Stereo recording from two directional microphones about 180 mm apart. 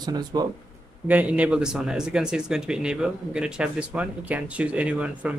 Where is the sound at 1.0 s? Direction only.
10° right (ahead or behind).